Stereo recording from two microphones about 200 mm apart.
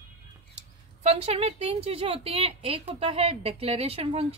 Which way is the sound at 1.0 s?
30° right (ahead or behind).